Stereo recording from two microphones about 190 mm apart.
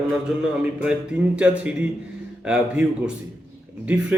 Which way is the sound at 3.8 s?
5° right (ahead or behind).